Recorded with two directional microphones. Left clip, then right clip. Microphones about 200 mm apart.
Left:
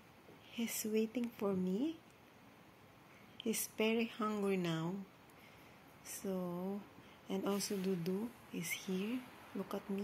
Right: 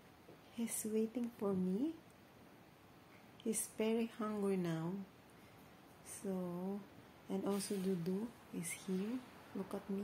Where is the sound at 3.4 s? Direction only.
5° left (ahead or behind).